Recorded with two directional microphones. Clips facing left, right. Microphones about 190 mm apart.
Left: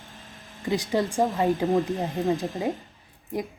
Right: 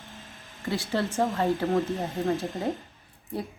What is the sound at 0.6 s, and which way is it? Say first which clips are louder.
Speech: left 3 dB; 15° left (ahead or behind).